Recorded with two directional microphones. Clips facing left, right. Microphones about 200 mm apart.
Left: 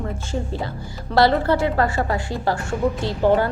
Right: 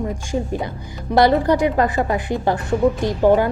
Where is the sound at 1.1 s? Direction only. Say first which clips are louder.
Right 2 dB; 15° right (ahead or behind).